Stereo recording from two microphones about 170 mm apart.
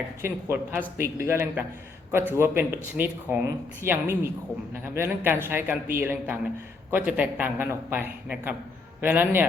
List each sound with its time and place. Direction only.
0.2 s speech: 15° right (ahead or behind)